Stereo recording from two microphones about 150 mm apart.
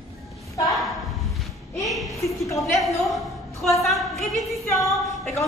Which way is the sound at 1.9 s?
Centre (ahead or behind).